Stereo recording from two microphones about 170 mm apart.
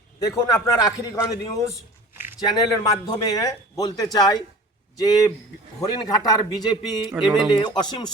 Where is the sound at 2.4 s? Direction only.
20° left (ahead or behind).